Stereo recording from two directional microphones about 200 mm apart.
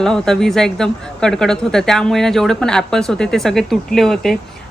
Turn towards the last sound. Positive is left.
turn(degrees=0)  # may be behind; listen again after turning